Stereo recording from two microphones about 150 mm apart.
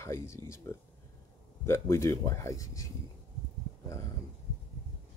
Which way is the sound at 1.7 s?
20° left (ahead or behind).